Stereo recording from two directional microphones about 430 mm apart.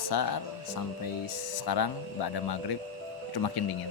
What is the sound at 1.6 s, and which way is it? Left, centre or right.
Speech, left.